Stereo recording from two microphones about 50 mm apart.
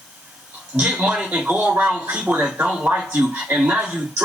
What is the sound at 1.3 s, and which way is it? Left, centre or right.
Speech, centre.